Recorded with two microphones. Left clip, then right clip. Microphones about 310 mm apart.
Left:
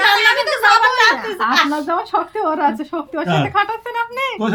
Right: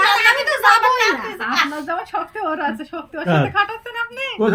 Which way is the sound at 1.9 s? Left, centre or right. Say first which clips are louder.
Left 5 dB; left.